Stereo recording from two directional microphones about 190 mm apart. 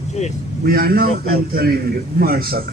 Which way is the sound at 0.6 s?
50° right (ahead or behind).